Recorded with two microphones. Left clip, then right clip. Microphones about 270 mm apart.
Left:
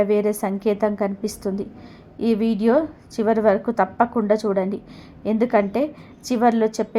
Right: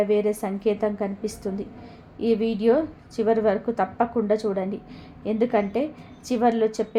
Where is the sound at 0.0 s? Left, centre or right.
Centre.